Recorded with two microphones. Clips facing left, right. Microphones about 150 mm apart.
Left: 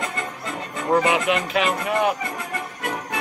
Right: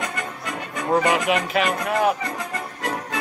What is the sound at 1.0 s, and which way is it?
Speech, centre (ahead or behind).